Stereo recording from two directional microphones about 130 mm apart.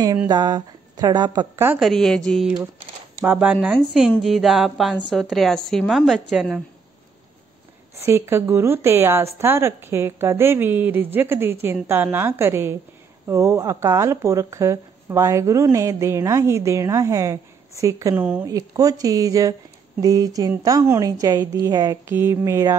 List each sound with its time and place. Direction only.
0.3 s speech: 35° right (ahead or behind)
1.8 s a woman's voice: centre (ahead or behind)
3.2 s a woman's voice: 10° right (ahead or behind)
8.0 s speech: 20° right (ahead or behind)
18.2 s speech: 10° right (ahead or behind)
18.5 s speech: 30° right (ahead or behind)
22.1 s speech: 20° right (ahead or behind)